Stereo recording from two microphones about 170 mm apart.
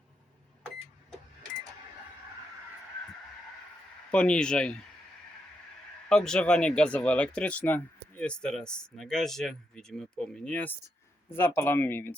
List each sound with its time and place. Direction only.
4.1 s speech: 5° left (ahead or behind)
6.1 s speech: 5° left (ahead or behind)